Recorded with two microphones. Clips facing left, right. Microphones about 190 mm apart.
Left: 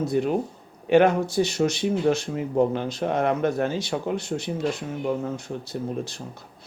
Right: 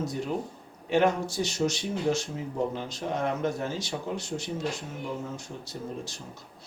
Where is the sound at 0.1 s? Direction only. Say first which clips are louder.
Left 8 dB; 70° left (ahead or behind).